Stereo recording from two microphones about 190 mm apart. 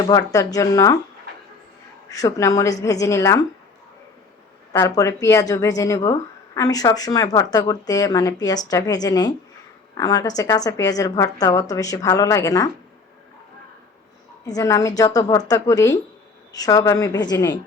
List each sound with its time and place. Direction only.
0.0 s a woman's voice: 20° left (ahead or behind)
2.0 s a woman's voice: 15° left (ahead or behind)
4.7 s a woman's voice: 15° left (ahead or behind)
14.4 s a woman's voice: 20° left (ahead or behind)